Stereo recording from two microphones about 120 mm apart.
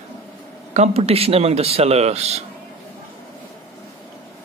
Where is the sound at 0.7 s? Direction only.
60° right (ahead or behind).